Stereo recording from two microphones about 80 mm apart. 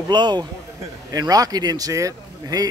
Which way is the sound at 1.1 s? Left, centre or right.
Right.